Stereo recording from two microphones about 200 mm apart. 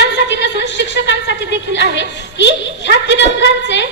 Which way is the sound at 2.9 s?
60° left (ahead or behind).